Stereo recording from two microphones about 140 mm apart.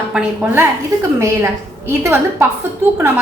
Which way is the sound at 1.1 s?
20° right (ahead or behind).